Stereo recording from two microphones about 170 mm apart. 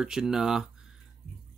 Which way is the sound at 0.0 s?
5° right (ahead or behind).